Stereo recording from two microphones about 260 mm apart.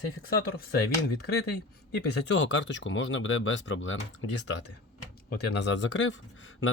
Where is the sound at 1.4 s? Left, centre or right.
Left.